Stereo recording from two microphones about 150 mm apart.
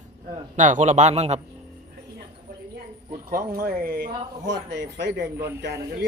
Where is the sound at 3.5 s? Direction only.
80° right.